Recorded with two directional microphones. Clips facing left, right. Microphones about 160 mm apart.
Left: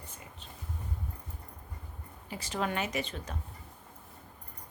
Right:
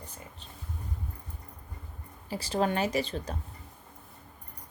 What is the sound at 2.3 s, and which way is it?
A woman's voice, 35° right (ahead or behind).